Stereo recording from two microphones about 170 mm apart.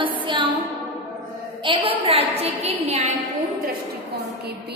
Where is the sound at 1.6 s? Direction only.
30° right (ahead or behind).